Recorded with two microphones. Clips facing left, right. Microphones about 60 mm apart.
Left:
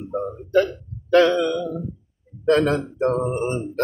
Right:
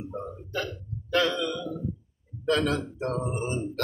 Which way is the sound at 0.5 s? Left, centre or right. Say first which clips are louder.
Left 16 dB; left.